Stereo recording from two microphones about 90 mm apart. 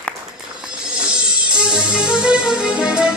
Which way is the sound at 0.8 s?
10° right (ahead or behind).